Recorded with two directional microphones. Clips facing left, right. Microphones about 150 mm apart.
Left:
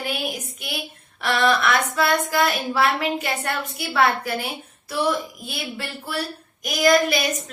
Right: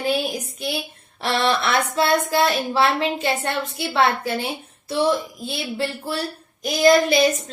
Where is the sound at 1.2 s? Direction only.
30° right (ahead or behind).